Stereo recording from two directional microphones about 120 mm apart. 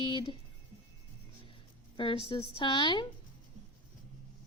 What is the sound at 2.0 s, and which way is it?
A woman's voice, 40° left (ahead or behind).